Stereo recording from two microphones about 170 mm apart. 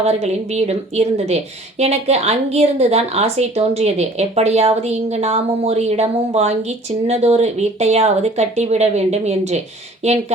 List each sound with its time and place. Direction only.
0.0 s a woman's voice: 40° right (ahead or behind)